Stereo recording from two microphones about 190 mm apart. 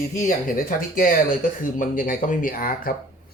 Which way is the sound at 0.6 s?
50° left (ahead or behind).